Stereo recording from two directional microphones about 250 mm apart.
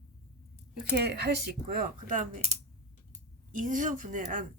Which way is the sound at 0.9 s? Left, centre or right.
Right.